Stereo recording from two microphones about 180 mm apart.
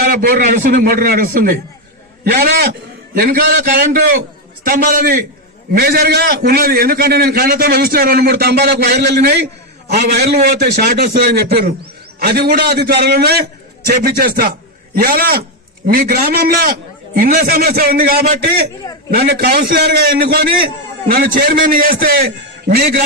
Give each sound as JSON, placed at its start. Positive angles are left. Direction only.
{"t": 0.0, "sound": "a man's voice", "side_deg": -50}